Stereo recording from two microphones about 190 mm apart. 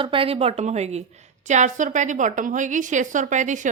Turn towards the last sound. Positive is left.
turn(degrees=-40)  # may be behind; listen again after turning